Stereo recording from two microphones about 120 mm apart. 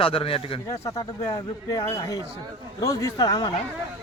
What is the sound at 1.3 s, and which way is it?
A man's voice, 30° left (ahead or behind).